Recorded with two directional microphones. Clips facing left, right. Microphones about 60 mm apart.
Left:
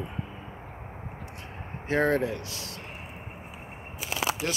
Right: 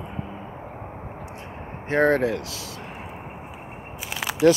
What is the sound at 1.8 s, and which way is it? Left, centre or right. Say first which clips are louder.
Speech: right 5 dB; right.